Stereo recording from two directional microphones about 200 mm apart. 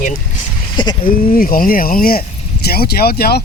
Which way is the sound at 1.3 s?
45° left (ahead or behind).